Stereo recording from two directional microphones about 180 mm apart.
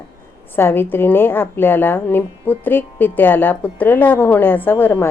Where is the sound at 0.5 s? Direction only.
10° left (ahead or behind).